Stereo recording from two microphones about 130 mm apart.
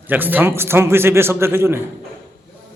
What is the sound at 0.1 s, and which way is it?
A man's voice, 15° right (ahead or behind).